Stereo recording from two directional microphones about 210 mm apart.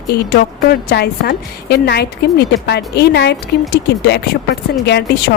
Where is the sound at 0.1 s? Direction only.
50° left (ahead or behind).